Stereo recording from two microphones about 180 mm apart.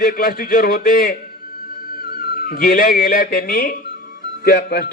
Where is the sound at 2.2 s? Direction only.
55° left (ahead or behind).